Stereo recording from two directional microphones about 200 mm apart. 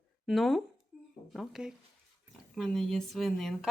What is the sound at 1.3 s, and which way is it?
Speech, centre (ahead or behind).